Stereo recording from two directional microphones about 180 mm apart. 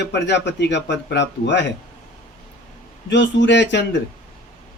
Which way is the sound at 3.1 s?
75° left (ahead or behind).